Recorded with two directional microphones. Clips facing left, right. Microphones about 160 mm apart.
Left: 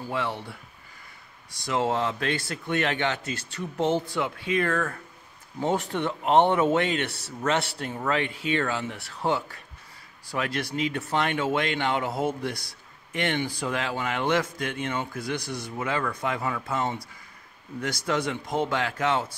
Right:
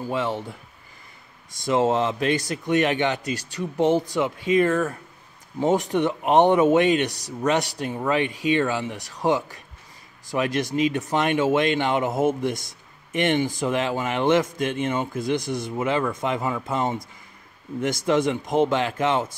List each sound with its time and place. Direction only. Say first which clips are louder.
0.1 s a man's voice: right 4 dB; 20° right (ahead or behind)
1.6 s a man's voice: right 5 dB; 25° right (ahead or behind)